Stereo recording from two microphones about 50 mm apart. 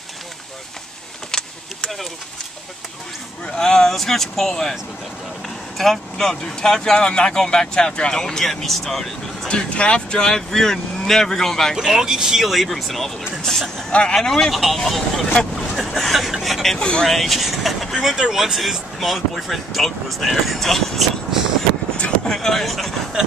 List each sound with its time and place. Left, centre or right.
1.3 s vehicle: centre
3.4 s speech: centre
5.8 s speech: centre
9.5 s speech: centre
11.7 s speech: centre
12.4 s speech: centre
16.7 s speech: centre
17.1 s speech: centre
21.9 s vehicle: left
22.3 s speech: centre